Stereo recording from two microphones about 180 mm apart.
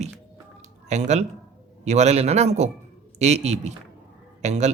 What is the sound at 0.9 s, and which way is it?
A man's voice, 40° right (ahead or behind).